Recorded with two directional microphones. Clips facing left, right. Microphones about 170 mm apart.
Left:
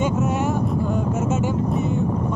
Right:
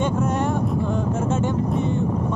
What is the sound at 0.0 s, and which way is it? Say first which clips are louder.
Speech: left 1 dB; 5° left (ahead or behind).